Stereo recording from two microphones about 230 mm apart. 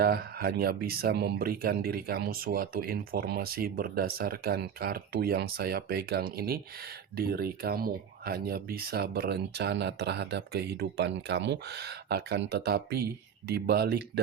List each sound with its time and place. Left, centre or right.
0.0 s speech: right